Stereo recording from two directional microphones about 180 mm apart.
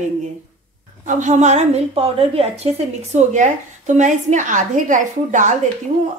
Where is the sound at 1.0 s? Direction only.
40° right (ahead or behind).